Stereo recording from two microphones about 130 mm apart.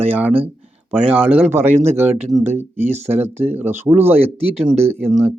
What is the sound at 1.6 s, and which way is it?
Speech, 60° right (ahead or behind).